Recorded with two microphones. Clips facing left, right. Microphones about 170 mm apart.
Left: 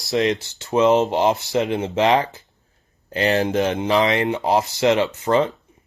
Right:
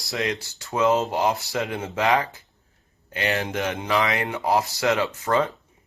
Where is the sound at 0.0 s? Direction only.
25° left (ahead or behind).